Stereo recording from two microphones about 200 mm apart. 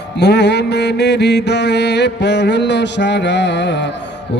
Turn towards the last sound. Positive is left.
turn(degrees=60)  # may be behind; listen again after turning